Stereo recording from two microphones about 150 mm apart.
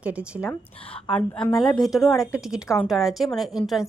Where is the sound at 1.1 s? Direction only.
5° left (ahead or behind).